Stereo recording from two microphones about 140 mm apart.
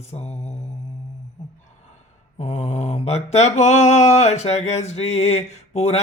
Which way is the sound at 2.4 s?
50° left (ahead or behind).